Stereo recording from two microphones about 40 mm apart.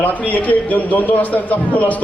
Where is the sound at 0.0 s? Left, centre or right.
Left.